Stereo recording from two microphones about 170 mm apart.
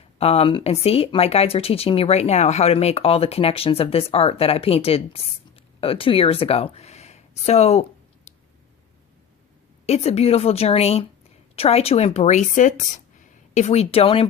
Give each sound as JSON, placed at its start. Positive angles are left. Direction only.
{"t": 0.2, "sound": "speech", "side_deg": 35}
{"t": 9.8, "sound": "speech", "side_deg": 40}